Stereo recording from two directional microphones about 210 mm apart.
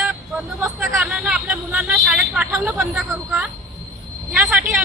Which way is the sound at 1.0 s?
Centre (ahead or behind).